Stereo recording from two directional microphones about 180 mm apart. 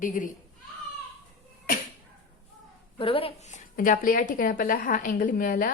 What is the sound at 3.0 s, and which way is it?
A woman's voice, 30° left (ahead or behind).